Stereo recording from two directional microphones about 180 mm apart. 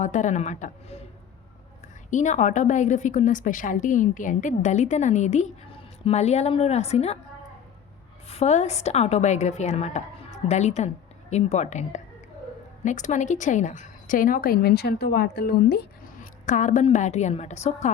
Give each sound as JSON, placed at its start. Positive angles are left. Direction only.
{"t": 0.0, "sound": "a woman's voice", "side_deg": 40}
{"t": 2.0, "sound": "a woman's voice", "side_deg": 40}
{"t": 8.3, "sound": "a woman's voice", "side_deg": 35}